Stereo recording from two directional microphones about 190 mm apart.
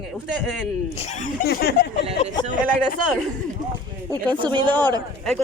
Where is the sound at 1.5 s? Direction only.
55° left (ahead or behind).